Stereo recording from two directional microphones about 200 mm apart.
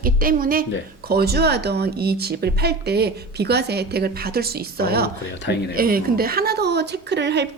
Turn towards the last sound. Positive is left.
turn(degrees=-60)  # may be behind; listen again after turning